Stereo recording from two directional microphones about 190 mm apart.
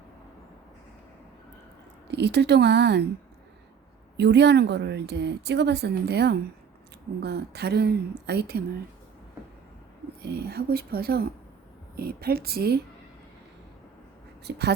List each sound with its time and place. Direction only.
2.0 s speech: 60° right (ahead or behind)
4.2 s speech: 65° right (ahead or behind)
10.2 s speech: 60° right (ahead or behind)
14.5 s speech: 60° right (ahead or behind)